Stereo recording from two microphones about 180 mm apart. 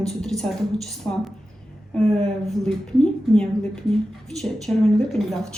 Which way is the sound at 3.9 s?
Centre (ahead or behind).